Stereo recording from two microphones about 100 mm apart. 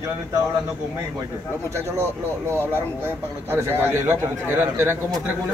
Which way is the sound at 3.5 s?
25° right (ahead or behind).